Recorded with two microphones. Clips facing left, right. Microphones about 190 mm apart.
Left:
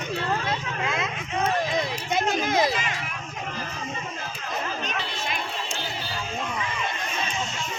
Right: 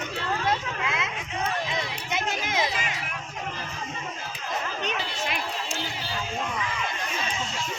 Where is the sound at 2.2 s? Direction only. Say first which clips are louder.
Left 6 dB; 50° left (ahead or behind).